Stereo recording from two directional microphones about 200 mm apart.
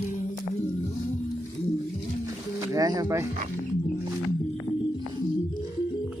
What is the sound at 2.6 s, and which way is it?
Speech, 20° right (ahead or behind).